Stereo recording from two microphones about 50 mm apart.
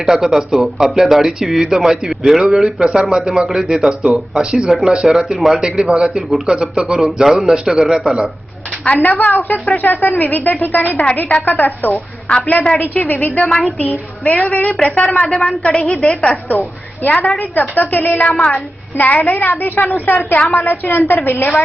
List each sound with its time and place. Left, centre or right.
0.0 s speech: centre
7.4 s speech: centre
9.0 s a woman's voice: left
10.9 s a woman's voice: left
11.4 s a woman's voice: left
12.5 s a woman's voice: left
12.8 s a woman's voice: left
15.2 s speech: centre
15.4 s a woman's voice: centre
16.5 s a woman's voice: left
19.3 s a woman's voice: left